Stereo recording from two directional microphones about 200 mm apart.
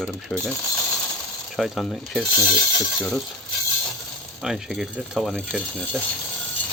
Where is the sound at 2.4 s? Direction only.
25° right (ahead or behind).